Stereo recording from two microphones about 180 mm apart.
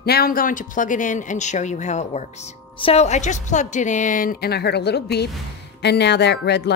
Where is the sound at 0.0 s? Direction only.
60° left (ahead or behind).